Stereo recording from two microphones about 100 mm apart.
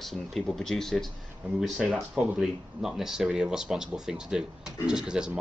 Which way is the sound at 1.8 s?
10° right (ahead or behind).